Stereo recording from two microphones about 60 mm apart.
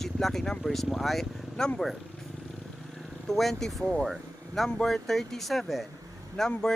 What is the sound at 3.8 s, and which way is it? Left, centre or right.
Speech, centre.